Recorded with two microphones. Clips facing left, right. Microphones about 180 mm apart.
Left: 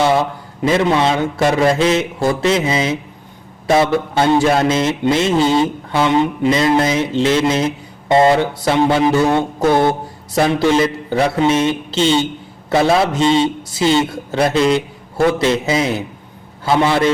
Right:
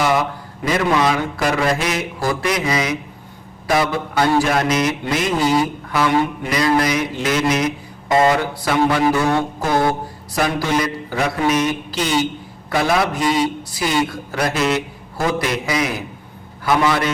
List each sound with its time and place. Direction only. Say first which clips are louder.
0.0 s mantra: left 3 dB; 25° left (ahead or behind)